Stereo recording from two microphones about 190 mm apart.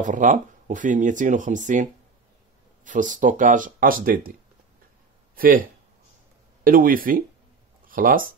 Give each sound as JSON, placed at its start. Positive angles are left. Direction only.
{"t": 0.0, "sound": "speech", "side_deg": -40}
{"t": 6.6, "sound": "speech", "side_deg": -50}